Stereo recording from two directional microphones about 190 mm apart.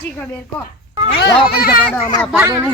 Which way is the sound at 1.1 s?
60° left (ahead or behind).